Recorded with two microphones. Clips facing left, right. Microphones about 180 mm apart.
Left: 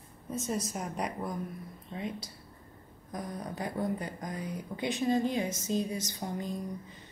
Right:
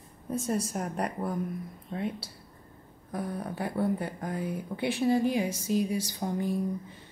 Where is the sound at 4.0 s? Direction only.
65° right (ahead or behind).